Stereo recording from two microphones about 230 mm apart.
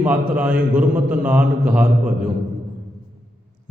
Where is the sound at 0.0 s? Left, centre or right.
Centre.